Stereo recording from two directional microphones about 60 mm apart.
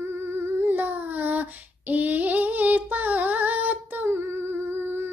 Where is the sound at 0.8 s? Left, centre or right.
Right.